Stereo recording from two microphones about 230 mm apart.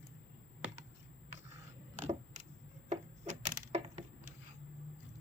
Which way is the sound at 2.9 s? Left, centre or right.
Right.